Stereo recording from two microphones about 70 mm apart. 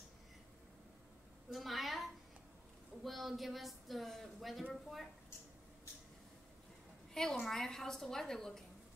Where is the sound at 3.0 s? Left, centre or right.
Centre.